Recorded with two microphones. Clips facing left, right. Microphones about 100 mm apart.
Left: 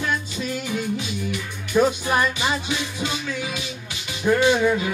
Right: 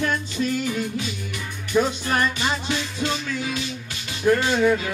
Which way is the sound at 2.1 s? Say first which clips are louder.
Left 1 dB; 10° left (ahead or behind).